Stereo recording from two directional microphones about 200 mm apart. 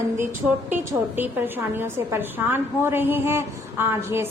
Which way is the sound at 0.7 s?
10° right (ahead or behind).